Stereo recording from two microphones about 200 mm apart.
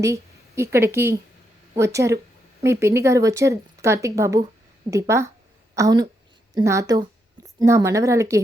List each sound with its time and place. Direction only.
0.0 s a woman's voice: 15° right (ahead or behind)